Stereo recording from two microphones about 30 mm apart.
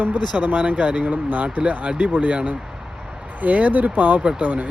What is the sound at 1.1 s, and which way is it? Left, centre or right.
Speech, right.